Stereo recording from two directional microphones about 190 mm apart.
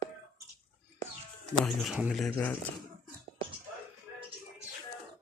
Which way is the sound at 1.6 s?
Centre (ahead or behind).